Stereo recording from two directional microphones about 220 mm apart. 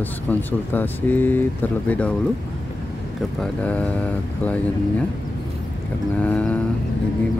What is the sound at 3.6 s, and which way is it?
Speech, 5° left (ahead or behind).